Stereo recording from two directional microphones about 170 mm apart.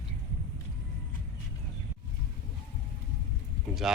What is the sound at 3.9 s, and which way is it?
Speech, 5° right (ahead or behind).